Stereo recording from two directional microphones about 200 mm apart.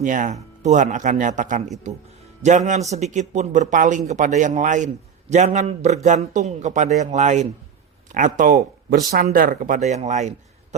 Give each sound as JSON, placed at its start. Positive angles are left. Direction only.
{"t": 0.0, "sound": "a man's voice", "side_deg": -40}